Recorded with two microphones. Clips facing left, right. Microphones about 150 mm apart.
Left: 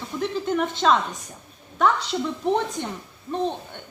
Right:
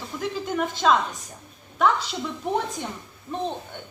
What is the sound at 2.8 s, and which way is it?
Speech, 10° right (ahead or behind).